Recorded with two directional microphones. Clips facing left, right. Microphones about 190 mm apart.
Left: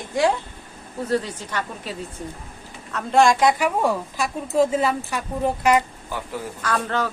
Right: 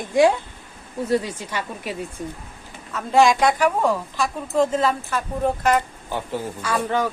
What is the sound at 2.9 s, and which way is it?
A woman's voice, centre (ahead or behind).